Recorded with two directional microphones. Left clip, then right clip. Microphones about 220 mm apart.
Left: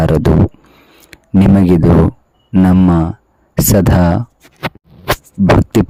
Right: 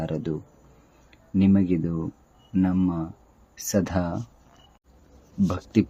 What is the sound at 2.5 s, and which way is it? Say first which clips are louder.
Speech: left 13 dB; 45° left (ahead or behind).